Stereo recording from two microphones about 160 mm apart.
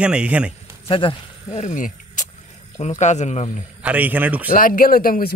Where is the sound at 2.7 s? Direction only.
45° left (ahead or behind).